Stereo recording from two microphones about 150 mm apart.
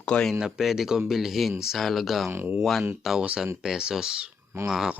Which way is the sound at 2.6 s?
Centre (ahead or behind).